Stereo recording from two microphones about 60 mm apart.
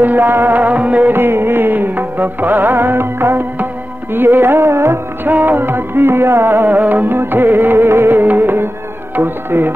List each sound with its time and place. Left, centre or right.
0.0 s music: right
1.1 s music: right
5.3 s music: right